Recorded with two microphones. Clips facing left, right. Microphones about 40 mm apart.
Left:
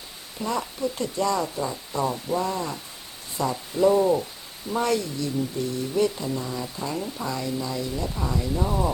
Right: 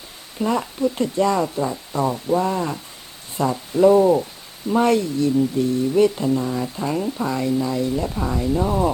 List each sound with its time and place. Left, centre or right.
0.3 s speech: right
3.8 s speech: centre
4.7 s speech: right